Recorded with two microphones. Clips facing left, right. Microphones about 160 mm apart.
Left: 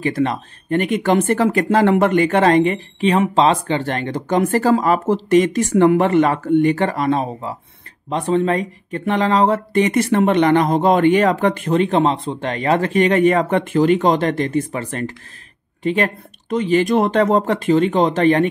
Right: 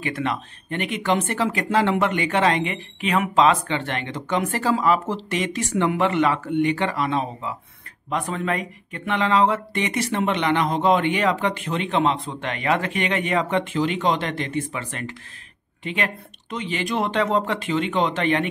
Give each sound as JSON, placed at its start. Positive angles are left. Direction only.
{"t": 0.0, "sound": "speech", "side_deg": 35}
{"t": 8.1, "sound": "speech", "side_deg": 30}